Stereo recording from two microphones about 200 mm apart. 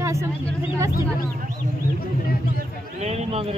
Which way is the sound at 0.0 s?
15° right (ahead or behind).